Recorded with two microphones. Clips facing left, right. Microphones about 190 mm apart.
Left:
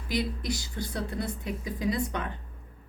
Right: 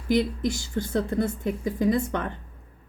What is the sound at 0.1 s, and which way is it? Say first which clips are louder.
Speech: right 7 dB; 50° right (ahead or behind).